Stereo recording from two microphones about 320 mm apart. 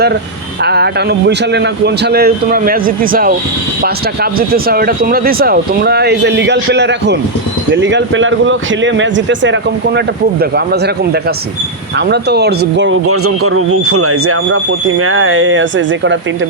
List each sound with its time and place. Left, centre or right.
0.6 s speech: right